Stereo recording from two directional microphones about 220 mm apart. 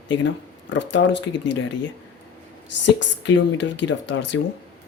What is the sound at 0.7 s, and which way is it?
Speech, 55° left (ahead or behind).